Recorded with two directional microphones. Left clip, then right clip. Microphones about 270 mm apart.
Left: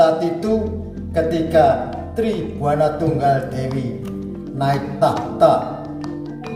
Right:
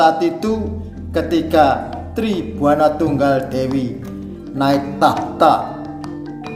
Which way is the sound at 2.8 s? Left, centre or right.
Right.